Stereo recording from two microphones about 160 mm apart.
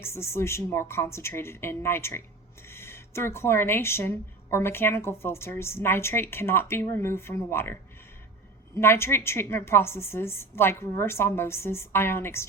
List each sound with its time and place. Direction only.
0.0 s speech: 15° left (ahead or behind)
8.7 s speech: 15° left (ahead or behind)